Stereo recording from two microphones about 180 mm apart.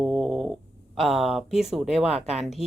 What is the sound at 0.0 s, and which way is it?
Snoring, 5° left (ahead or behind).